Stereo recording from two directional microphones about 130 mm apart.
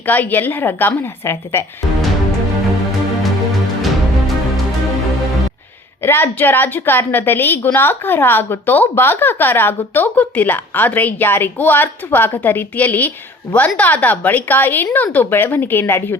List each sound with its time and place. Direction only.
0.0 s a woman's voice: 15° left (ahead or behind)
6.0 s a woman's voice: 15° left (ahead or behind)